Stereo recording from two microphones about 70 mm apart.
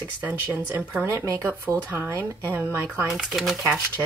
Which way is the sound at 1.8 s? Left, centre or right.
Right.